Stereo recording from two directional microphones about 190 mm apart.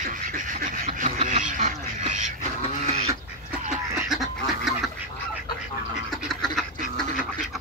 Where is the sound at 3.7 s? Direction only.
Centre (ahead or behind).